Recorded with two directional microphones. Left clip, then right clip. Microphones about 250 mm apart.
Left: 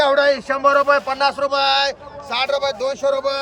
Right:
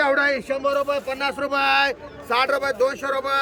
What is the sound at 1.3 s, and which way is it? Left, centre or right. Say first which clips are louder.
Speech: left 3 dB; centre.